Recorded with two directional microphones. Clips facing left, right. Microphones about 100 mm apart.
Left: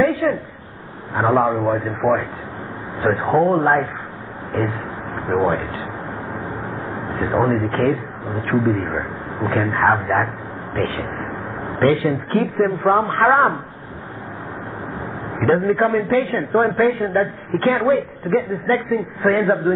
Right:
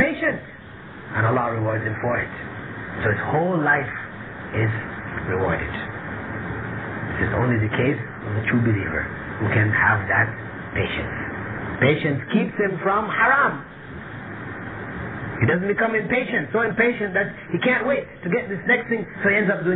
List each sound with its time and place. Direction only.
0.0 s a sound: 35° left (ahead or behind)
1.1 s a man's voice: 40° left (ahead or behind)
7.1 s a man's voice: 35° left (ahead or behind)
15.3 s a man's voice: 40° left (ahead or behind)